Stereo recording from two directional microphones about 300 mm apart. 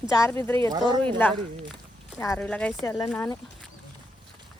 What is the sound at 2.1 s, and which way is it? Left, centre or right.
A woman's voice, centre.